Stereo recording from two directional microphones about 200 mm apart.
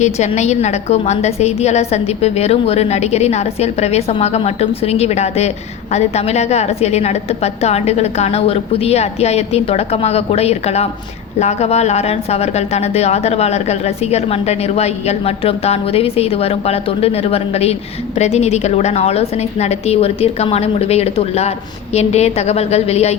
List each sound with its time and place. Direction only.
0.0 s a woman's voice: 35° left (ahead or behind)